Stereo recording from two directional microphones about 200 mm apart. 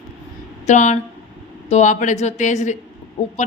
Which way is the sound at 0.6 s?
35° left (ahead or behind).